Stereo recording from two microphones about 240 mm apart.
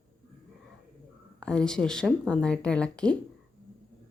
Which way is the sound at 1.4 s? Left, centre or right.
Centre.